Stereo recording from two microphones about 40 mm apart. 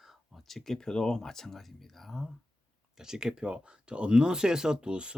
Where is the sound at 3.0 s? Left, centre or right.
Centre.